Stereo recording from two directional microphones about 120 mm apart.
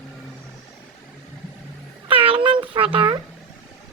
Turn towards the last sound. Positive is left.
turn(degrees=-45)  # may be behind; listen again after turning